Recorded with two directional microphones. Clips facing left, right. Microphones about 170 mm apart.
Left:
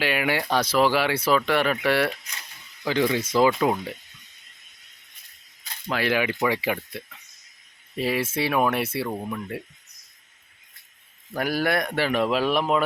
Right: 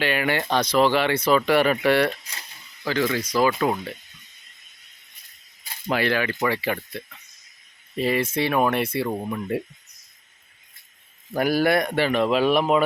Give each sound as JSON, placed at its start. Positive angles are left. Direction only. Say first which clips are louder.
{"t": 0.0, "sound": "speech", "louder": "right 1 dB", "side_deg": 5}
{"t": 2.8, "sound": "speech", "louder": "left 1 dB", "side_deg": 20}
{"t": 3.6, "sound": "speech", "louder": "even", "side_deg": 15}
{"t": 6.0, "sound": "speech", "louder": "left 1 dB", "side_deg": 10}
{"t": 9.0, "sound": "speech", "louder": "right 4 dB", "side_deg": -10}
{"t": 11.3, "sound": "speech", "louder": "right 4 dB", "side_deg": 0}